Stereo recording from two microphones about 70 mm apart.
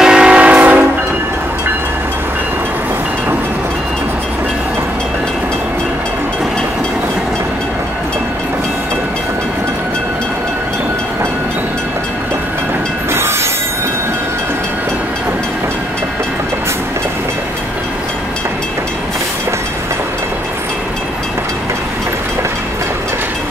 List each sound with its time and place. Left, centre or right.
0.0 s train: centre
13.1 s train: right